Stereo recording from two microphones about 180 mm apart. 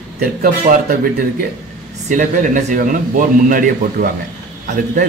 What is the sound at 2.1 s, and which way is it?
A man's voice, 45° right (ahead or behind).